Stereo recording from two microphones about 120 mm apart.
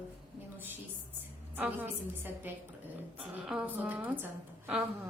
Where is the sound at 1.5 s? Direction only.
15° right (ahead or behind).